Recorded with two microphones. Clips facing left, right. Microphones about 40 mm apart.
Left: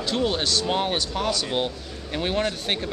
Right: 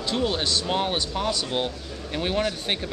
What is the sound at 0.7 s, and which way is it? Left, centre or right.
Speech, centre.